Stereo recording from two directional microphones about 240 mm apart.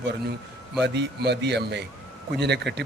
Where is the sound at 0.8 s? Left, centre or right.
Right.